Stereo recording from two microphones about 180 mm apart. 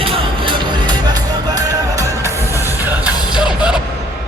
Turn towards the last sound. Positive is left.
turn(degrees=-5)  # may be behind; listen again after turning